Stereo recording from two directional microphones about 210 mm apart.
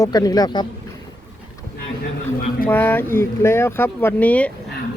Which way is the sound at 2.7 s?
10° left (ahead or behind).